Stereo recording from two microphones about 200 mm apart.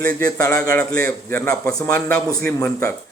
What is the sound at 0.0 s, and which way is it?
A man's voice, 10° left (ahead or behind).